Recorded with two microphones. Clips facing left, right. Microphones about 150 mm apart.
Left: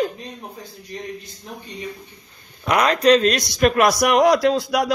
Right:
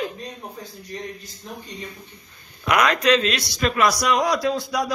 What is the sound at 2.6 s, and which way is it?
A man's voice, 35° left (ahead or behind).